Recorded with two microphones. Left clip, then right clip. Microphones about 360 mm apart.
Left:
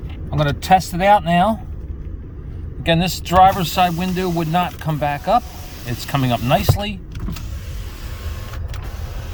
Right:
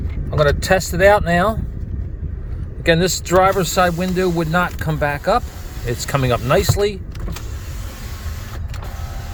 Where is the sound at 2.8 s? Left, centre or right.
Centre.